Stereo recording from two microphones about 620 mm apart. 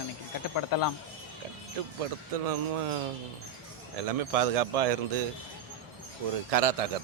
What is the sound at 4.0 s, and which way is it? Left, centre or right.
Speech, right.